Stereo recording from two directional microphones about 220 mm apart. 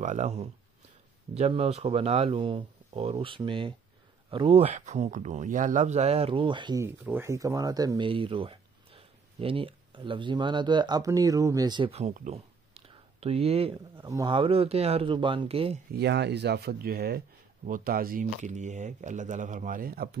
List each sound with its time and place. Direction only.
0.0 s speech: 30° right (ahead or behind)
15.9 s speech: 50° right (ahead or behind)